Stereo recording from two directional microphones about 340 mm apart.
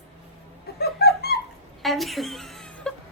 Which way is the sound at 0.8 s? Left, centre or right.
Left.